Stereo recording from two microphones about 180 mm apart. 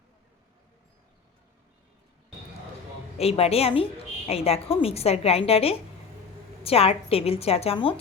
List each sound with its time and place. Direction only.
3.2 s a woman's voice: 35° left (ahead or behind)